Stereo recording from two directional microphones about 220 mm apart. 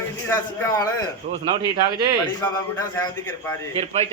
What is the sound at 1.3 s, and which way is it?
Speech, 25° right (ahead or behind).